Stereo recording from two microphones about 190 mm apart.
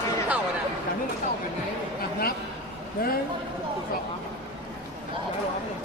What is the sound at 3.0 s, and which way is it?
Speech, 50° left (ahead or behind).